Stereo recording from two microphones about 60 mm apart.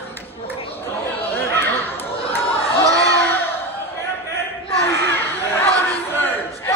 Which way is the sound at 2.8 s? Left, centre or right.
Right.